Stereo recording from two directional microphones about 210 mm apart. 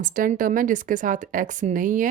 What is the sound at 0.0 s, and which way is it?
Speech, 40° right (ahead or behind).